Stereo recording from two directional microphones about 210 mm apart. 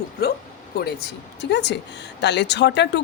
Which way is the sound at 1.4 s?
55° left (ahead or behind).